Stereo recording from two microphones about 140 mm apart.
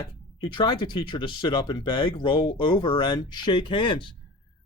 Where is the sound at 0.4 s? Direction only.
35° left (ahead or behind).